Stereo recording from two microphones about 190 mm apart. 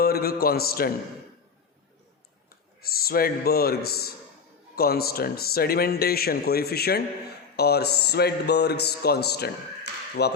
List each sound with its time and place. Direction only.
0.0 s a man's voice: 55° left (ahead or behind)
2.8 s speech: 50° left (ahead or behind)